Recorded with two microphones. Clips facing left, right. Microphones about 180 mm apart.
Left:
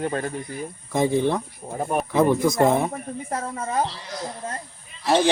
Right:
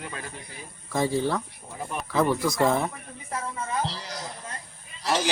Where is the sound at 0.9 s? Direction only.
20° left (ahead or behind).